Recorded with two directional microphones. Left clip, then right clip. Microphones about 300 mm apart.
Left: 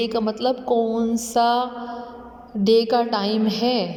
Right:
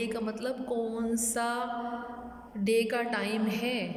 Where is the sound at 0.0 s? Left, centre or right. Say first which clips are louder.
Left 11 dB; centre.